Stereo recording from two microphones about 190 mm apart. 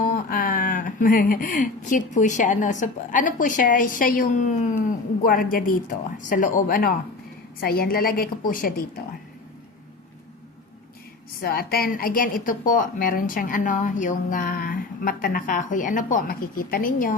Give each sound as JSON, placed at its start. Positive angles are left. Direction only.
{"t": 0.0, "sound": "speech", "side_deg": 50}
{"t": 11.3, "sound": "speech", "side_deg": 50}